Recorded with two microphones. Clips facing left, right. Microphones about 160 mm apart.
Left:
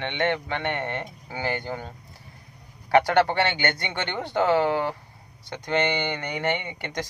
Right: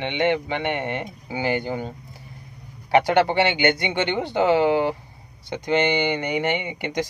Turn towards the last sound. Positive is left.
turn(degrees=-15)  # may be behind; listen again after turning